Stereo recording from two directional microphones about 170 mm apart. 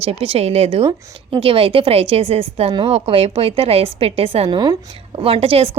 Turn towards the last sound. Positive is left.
turn(degrees=-35)  # may be behind; listen again after turning